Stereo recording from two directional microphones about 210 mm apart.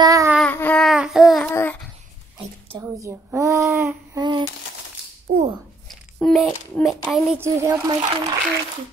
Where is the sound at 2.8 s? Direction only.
15° right (ahead or behind).